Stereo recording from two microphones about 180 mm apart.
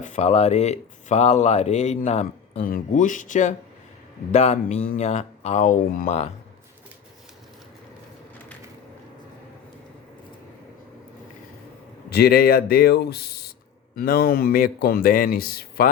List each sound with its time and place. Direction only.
0.0 s speech: 40° left (ahead or behind)
2.6 s speech: 50° left (ahead or behind)
12.1 s speech: 60° left (ahead or behind)